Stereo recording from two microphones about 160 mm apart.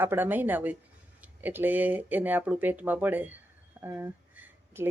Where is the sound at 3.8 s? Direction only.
15° right (ahead or behind).